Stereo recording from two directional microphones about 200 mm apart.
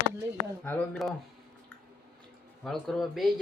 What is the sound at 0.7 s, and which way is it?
Speech, 5° left (ahead or behind).